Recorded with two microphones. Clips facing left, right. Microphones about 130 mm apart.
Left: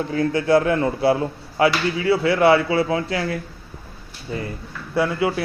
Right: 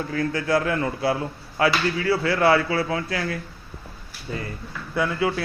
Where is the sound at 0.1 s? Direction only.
25° left (ahead or behind).